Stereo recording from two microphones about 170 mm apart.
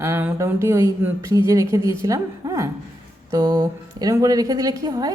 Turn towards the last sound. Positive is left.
turn(degrees=-20)  # may be behind; listen again after turning